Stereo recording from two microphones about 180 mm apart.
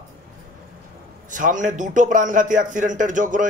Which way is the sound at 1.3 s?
45° right (ahead or behind).